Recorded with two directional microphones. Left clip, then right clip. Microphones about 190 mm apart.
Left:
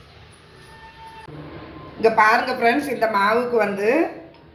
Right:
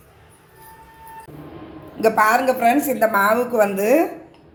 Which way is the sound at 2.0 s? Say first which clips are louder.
Even; 60° right (ahead or behind).